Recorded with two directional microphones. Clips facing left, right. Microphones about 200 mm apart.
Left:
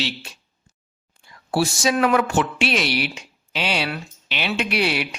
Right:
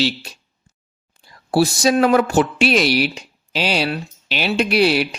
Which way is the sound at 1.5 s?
35° right (ahead or behind).